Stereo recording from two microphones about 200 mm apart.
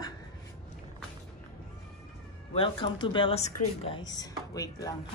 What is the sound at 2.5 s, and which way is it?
Speech, 25° left (ahead or behind).